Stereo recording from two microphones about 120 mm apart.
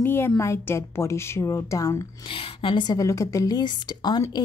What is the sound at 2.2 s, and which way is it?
Speech, 45° left (ahead or behind).